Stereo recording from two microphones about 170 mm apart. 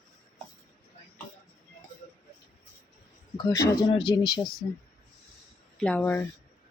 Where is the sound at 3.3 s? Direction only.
20° left (ahead or behind).